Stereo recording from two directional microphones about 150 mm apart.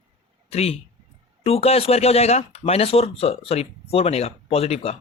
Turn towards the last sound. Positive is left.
turn(degrees=40)  # may be behind; listen again after turning